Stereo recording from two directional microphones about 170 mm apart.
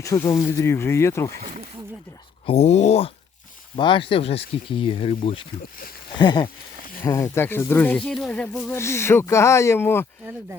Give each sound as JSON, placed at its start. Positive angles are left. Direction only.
{"t": 0.0, "sound": "speech", "side_deg": 15}
{"t": 2.5, "sound": "speech", "side_deg": 40}